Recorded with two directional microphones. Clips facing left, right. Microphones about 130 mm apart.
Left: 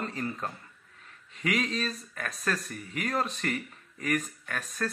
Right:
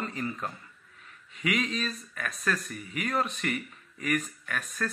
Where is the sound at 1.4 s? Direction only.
40° left (ahead or behind).